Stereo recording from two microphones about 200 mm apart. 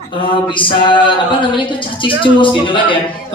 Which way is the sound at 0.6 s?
25° left (ahead or behind).